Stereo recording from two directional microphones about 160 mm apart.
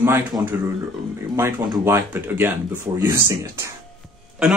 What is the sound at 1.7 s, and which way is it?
Speech, 15° right (ahead or behind).